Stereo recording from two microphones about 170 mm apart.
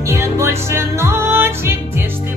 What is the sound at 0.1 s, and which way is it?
Music, 15° right (ahead or behind).